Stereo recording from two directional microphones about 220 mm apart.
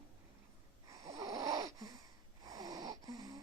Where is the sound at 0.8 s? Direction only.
15° right (ahead or behind).